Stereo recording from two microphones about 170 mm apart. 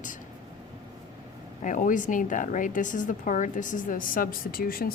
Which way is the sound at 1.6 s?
50° left (ahead or behind).